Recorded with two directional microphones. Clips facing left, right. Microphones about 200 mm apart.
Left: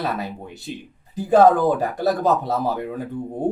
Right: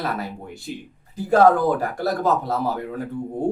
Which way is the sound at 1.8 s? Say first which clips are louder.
Left 3 dB; 20° left (ahead or behind).